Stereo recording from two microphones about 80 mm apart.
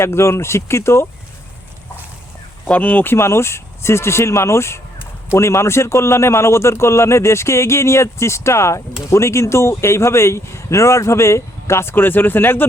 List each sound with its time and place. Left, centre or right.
0.0 s speech: left
2.6 s speech: centre